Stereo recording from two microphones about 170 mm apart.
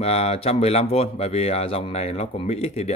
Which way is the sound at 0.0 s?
35° left (ahead or behind).